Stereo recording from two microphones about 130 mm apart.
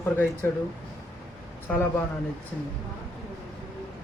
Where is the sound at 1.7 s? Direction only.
15° left (ahead or behind).